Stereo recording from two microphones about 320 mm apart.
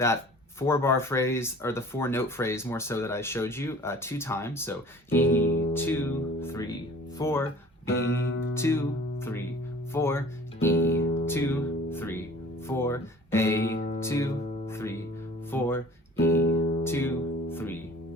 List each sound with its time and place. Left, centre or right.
0.6 s speech: centre
9.9 s music: centre
12.6 s speech: centre
13.7 s music: left
14.0 s speech: centre
14.4 s music: left
14.7 s music: centre